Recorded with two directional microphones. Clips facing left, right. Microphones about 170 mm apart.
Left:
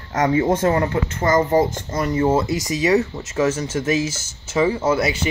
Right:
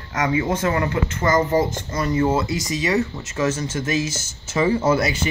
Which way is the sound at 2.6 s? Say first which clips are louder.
Left 4 dB; 10° left (ahead or behind).